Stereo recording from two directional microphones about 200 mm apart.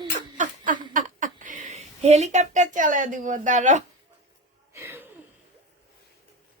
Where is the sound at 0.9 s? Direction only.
40° right (ahead or behind).